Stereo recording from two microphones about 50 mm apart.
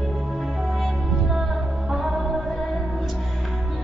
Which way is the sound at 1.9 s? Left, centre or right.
Centre.